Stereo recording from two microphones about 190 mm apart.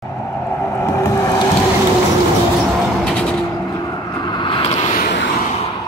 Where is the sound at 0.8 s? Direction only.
15° left (ahead or behind).